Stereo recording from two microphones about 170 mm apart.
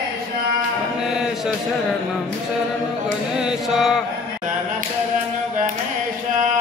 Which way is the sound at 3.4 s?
5° right (ahead or behind).